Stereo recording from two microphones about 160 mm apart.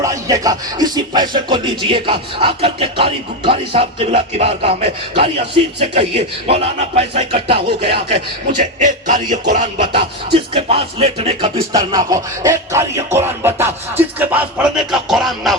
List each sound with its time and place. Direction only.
0.0 s music: 20° right (ahead or behind); by 8.2 s 35° right (ahead or behind)
8.8 s music: 50° right (ahead or behind)
9.9 s music: 35° right (ahead or behind)
11.7 s music: 25° right (ahead or behind); by 15.5 s centre (ahead or behind)